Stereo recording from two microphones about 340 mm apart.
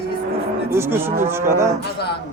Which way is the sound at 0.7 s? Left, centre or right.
Centre.